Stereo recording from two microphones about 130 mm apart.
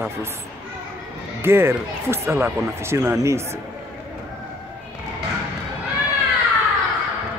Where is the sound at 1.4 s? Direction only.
20° right (ahead or behind).